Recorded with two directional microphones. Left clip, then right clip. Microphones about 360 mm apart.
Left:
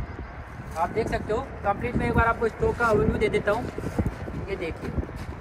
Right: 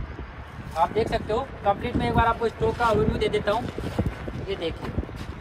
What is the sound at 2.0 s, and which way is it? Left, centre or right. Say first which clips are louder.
Speech: left 1 dB; right.